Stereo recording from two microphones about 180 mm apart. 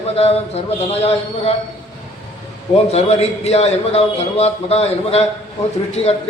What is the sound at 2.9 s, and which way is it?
Speech, 35° left (ahead or behind).